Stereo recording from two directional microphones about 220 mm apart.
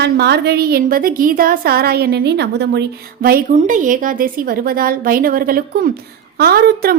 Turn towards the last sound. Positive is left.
turn(degrees=-45)  # may be behind; listen again after turning